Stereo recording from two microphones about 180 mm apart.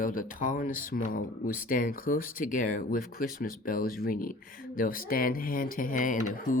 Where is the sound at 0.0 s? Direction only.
50° left (ahead or behind).